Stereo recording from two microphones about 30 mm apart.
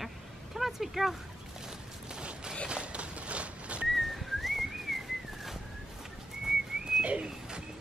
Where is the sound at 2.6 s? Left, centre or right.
Right.